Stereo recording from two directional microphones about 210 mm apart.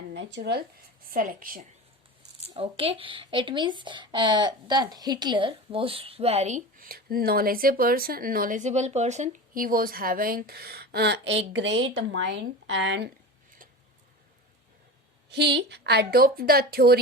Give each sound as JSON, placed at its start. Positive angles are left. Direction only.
{"t": 0.1, "sound": "speech", "side_deg": -60}
{"t": 1.0, "sound": "speech", "side_deg": -40}
{"t": 2.5, "sound": "speech", "side_deg": -25}
{"t": 15.3, "sound": "a woman's voice", "side_deg": -55}